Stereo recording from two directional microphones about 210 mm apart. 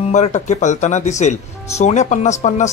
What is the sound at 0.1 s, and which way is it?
Speech, 35° left (ahead or behind).